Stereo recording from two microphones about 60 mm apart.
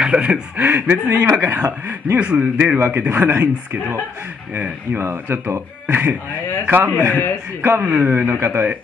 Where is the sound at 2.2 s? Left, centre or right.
Right.